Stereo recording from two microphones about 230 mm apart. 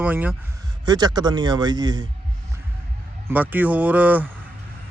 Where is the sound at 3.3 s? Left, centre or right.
Centre.